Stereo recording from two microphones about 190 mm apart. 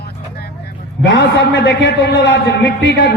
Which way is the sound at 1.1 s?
75° left (ahead or behind).